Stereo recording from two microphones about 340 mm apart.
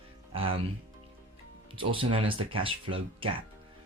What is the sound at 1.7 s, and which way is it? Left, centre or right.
Speech, centre.